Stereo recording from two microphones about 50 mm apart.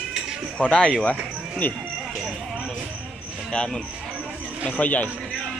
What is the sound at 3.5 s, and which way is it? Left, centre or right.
Speech, centre.